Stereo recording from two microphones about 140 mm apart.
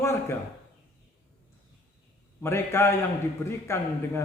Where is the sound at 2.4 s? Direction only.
20° left (ahead or behind).